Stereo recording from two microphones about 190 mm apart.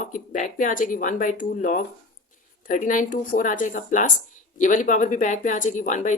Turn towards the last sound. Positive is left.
turn(degrees=40)  # may be behind; listen again after turning